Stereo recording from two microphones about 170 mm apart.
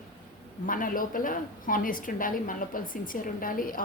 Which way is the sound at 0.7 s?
55° left (ahead or behind).